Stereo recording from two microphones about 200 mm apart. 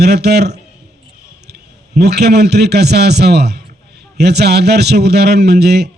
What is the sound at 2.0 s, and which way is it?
A man's voice, 55° right (ahead or behind).